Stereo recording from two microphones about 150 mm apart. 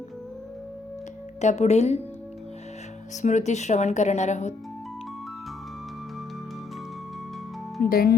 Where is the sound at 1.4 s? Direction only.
50° left (ahead or behind).